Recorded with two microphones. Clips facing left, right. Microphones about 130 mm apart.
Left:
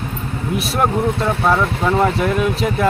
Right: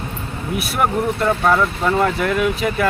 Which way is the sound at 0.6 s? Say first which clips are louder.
Left 1 dB; centre (ahead or behind).